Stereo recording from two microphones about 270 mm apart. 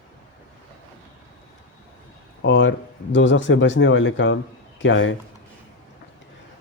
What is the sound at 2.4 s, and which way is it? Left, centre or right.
Speech, left.